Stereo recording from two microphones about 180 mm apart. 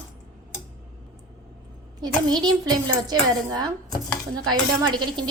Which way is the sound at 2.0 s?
25° right (ahead or behind).